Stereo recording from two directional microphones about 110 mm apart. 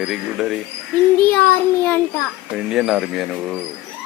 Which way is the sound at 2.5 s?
5° right (ahead or behind).